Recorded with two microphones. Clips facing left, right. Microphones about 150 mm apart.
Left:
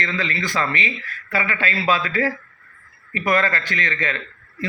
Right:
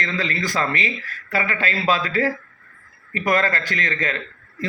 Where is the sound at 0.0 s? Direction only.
40° right (ahead or behind).